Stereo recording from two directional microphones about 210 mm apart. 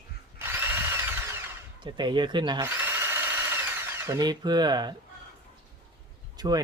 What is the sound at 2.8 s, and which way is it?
Drill, 10° right (ahead or behind).